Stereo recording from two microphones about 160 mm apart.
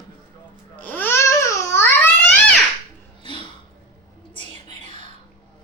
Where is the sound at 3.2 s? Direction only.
30° left (ahead or behind).